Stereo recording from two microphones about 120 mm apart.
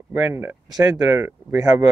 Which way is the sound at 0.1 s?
20° right (ahead or behind).